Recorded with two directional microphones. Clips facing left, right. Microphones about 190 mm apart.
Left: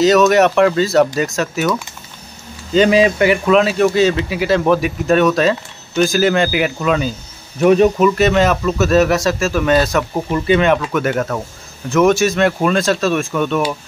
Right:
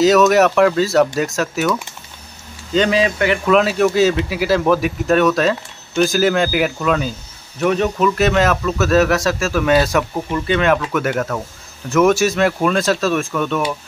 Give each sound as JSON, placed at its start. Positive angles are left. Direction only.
{"t": 0.0, "sound": "speech", "side_deg": -5}
{"t": 2.7, "sound": "speech", "side_deg": 10}
{"t": 3.4, "sound": "speech", "side_deg": 0}
{"t": 7.6, "sound": "speech", "side_deg": 20}
{"t": 8.0, "sound": "speech", "side_deg": 0}
{"t": 10.3, "sound": "speech", "side_deg": 10}
{"t": 10.6, "sound": "speech", "side_deg": 0}